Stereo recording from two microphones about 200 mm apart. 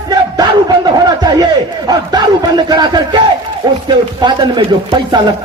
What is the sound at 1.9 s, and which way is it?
Speech, 20° right (ahead or behind).